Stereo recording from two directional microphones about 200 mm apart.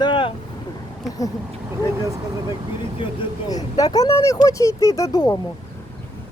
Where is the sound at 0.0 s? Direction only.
25° left (ahead or behind).